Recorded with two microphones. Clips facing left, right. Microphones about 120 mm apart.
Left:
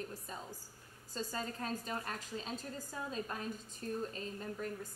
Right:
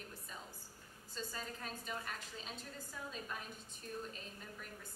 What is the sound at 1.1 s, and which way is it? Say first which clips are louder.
A woman's voice: left 6 dB; 40° left (ahead or behind).